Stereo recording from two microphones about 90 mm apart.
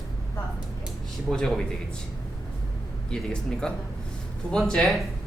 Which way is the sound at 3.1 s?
10° left (ahead or behind).